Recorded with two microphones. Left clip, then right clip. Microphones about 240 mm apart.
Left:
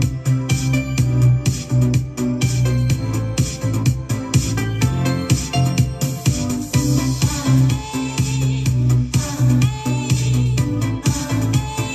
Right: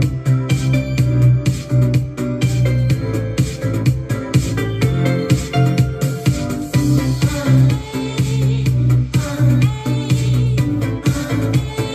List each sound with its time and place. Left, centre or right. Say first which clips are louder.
0.0 s music: right 2 dB; left